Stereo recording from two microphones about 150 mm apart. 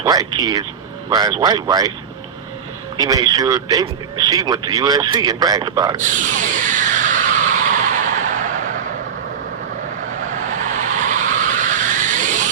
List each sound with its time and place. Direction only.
0.0 s speech: 25° right (ahead or behind)
3.0 s speech: 25° right (ahead or behind)
6.0 s a sound: 60° right (ahead or behind)
10.5 s vehicle: 60° right (ahead or behind)